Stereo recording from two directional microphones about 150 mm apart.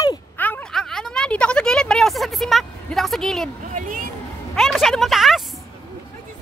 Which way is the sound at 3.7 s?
60° right (ahead or behind).